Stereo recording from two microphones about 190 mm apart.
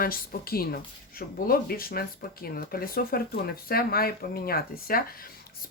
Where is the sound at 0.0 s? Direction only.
50° left (ahead or behind).